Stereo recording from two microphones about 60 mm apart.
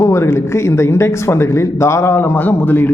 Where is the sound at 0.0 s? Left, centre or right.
Left.